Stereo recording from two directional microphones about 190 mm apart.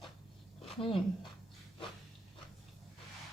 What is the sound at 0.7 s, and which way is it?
Speech, 30° left (ahead or behind).